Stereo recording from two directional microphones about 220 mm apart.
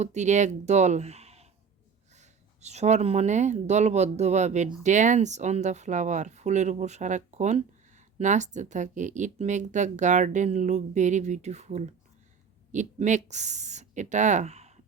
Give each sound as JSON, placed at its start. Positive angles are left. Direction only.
{"t": 0.0, "sound": "speech", "side_deg": -30}